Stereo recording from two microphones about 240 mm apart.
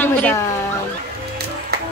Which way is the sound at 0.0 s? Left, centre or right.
Centre.